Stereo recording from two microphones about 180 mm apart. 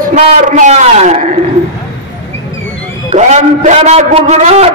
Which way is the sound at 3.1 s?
40° right (ahead or behind).